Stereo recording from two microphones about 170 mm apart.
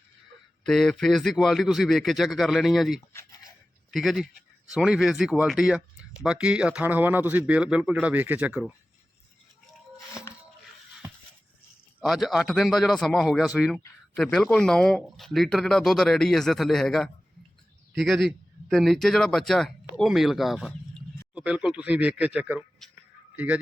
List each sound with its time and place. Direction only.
0.6 s a man's voice: 5° left (ahead or behind)
3.1 s a sound: 20° left (ahead or behind)
3.9 s a man's voice: centre (ahead or behind)
11.9 s a man's voice: centre (ahead or behind)